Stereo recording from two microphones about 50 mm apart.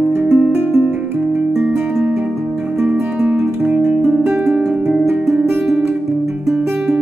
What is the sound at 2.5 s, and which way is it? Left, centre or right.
Music, right.